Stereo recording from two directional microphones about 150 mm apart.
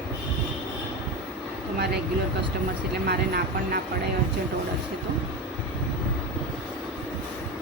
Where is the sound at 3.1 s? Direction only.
90° right.